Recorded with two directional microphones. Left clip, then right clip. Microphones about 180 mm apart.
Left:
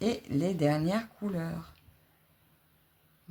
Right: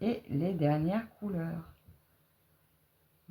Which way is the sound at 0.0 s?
35° left (ahead or behind).